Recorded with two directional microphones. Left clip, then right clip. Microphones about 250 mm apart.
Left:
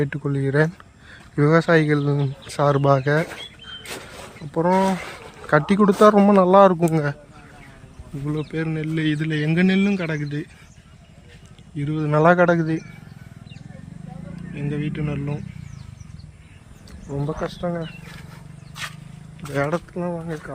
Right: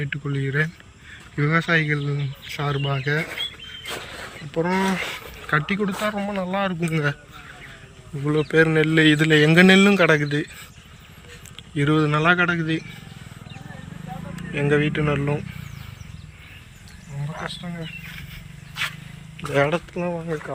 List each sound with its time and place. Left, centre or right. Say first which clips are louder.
0.0 s speech: left 4 dB; left
4.5 s speech: left 3 dB; centre
8.2 s speech: right 9 dB; centre
11.7 s speech: right 7 dB; centre
12.1 s speech: left 8 dB; left
14.5 s speech: right 9 dB; centre
17.5 s speech: left 7 dB; left
19.5 s speech: right 3 dB; centre